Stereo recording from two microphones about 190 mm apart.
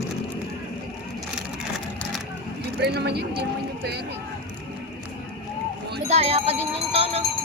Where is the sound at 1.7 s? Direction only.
Centre (ahead or behind).